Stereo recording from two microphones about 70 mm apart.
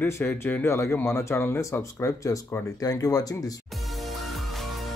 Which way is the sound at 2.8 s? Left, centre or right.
Left.